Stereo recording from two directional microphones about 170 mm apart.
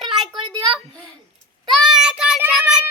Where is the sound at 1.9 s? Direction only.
5° right (ahead or behind).